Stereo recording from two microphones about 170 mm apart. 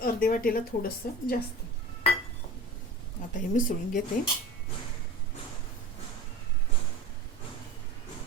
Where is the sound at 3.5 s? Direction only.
50° left (ahead or behind).